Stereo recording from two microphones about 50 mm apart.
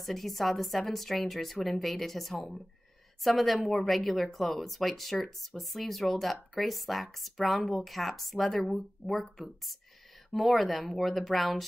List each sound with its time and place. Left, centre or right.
0.0 s speech: centre
10.3 s speech: centre